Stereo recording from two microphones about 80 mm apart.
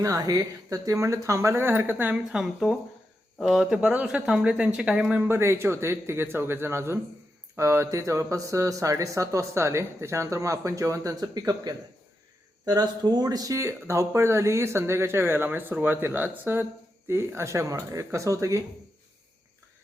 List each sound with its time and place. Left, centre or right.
0.0 s speech: right
2.1 s a woman's voice: centre
5.3 s speech: right